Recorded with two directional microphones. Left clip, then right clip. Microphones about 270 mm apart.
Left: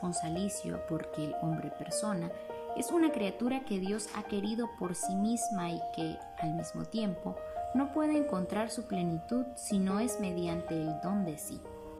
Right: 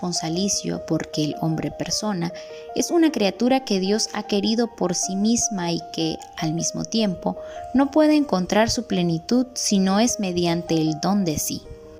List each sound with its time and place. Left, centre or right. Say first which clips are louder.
0.2 s a woman's voice: right 13 dB; right